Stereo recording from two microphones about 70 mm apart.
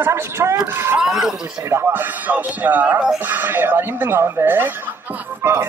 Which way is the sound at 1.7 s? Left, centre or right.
Right.